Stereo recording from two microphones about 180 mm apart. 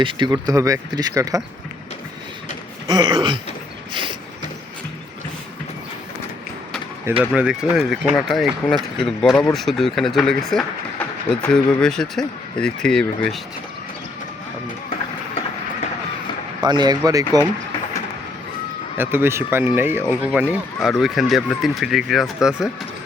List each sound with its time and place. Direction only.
0.0 s speech: 25° right (ahead or behind)
2.8 s speech: 20° right (ahead or behind)
7.2 s speech: 5° right (ahead or behind)
16.6 s speech: 25° right (ahead or behind)
18.9 s speech: 10° right (ahead or behind)